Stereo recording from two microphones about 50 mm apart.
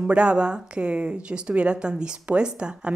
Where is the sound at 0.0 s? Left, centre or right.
Right.